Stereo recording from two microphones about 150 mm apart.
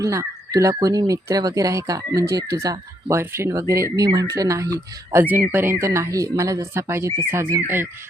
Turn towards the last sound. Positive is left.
turn(degrees=-15)  # may be behind; listen again after turning